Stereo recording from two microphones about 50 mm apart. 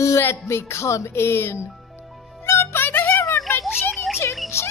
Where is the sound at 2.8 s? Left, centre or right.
Left.